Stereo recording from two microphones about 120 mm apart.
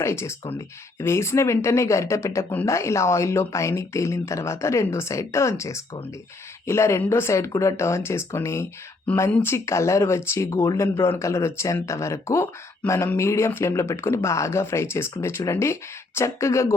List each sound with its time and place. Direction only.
0.0 s speech: 25° left (ahead or behind)